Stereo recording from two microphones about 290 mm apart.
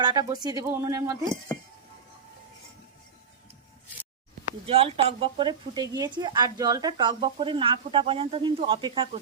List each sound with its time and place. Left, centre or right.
0.0 s speech: centre
4.6 s speech: centre